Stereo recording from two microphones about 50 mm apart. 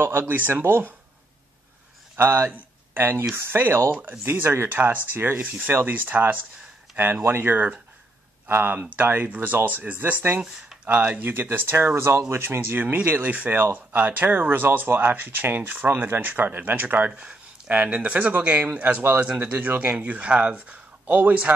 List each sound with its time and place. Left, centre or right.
0.0 s speech: right
2.1 s speech: right
2.5 s speech: right
5.4 s speech: right
5.7 s speech: right
8.7 s speech: right
11.9 s speech: right
17.1 s speech: right